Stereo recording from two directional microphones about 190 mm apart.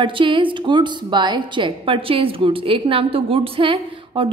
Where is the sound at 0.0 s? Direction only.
25° right (ahead or behind).